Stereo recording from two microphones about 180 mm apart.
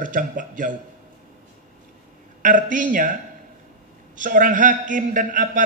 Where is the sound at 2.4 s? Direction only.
45° right (ahead or behind).